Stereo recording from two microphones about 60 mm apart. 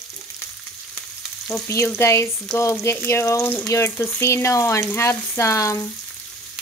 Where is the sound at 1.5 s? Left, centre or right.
Centre.